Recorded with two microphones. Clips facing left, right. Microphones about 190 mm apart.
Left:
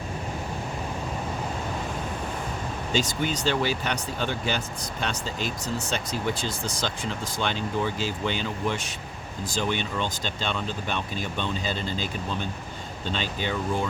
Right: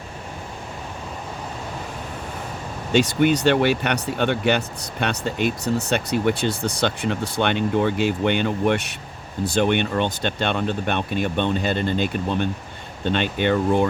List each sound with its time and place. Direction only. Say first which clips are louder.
2.9 s speech: right 10 dB; 65° right (ahead or behind)